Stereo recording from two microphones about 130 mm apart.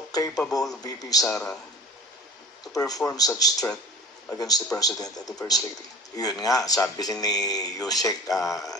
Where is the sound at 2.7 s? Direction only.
25° left (ahead or behind).